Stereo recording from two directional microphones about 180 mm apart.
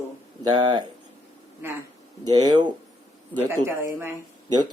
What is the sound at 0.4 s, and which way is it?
Speech, 20° right (ahead or behind).